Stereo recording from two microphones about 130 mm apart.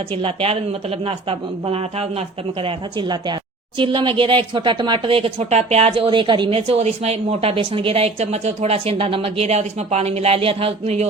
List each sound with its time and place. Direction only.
0.1 s a woman's voice: 40° right (ahead or behind)
6.6 s a woman's voice: 50° right (ahead or behind)